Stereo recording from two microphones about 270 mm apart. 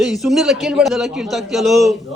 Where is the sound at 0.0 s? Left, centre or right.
Centre.